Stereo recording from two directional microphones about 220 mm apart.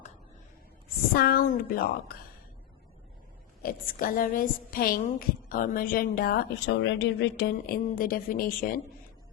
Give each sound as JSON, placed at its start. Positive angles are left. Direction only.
{"t": 1.1, "sound": "a woman's voice", "side_deg": 45}
{"t": 3.6, "sound": "a woman's voice", "side_deg": 40}